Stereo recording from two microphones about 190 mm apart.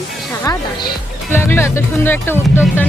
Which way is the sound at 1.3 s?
10° left (ahead or behind).